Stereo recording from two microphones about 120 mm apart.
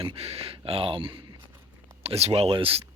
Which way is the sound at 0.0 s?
55° right (ahead or behind).